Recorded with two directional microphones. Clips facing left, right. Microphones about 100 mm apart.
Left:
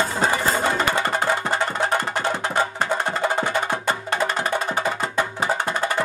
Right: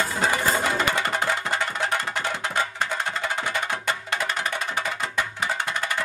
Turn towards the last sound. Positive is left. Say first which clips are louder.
# left 5 dB
turn(degrees=35)  # may be behind; listen again after turning